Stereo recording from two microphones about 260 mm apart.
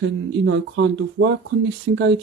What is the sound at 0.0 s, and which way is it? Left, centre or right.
Speech, right.